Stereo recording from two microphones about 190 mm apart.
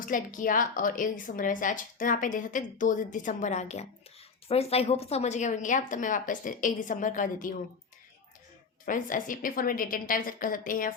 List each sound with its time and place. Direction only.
0.0 s a woman's voice: 45° left (ahead or behind)
8.9 s a woman's voice: 45° left (ahead or behind)